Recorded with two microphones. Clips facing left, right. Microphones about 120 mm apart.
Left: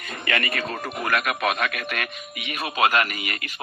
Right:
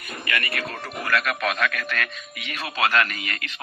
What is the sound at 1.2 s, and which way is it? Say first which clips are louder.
Speech: left 1 dB; 10° left (ahead or behind).